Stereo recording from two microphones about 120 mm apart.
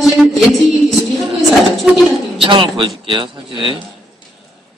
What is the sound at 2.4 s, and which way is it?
A man's voice, 45° right (ahead or behind).